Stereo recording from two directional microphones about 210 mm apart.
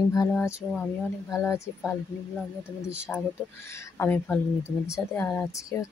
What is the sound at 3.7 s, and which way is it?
Speech, 10° left (ahead or behind).